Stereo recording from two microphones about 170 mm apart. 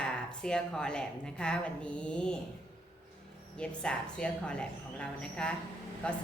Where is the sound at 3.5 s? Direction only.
5° left (ahead or behind).